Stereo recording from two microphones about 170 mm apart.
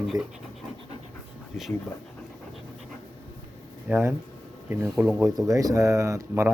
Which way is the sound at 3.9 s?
10° right (ahead or behind).